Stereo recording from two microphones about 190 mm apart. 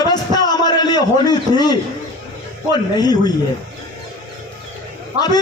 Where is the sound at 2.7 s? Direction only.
20° left (ahead or behind).